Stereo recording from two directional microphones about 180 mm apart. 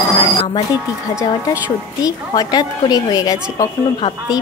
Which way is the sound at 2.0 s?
20° left (ahead or behind).